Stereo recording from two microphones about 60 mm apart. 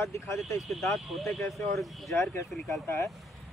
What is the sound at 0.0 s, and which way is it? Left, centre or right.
Speech, left.